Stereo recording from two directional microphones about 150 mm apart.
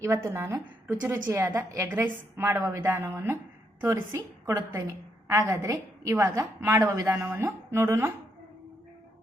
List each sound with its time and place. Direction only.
0.0 s a woman's voice: 20° right (ahead or behind)